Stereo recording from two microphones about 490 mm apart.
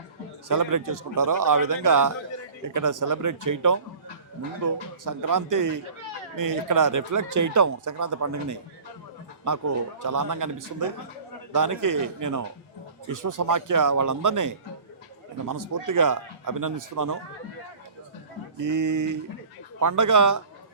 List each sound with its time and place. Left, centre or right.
0.4 s speech: right
18.6 s speech: right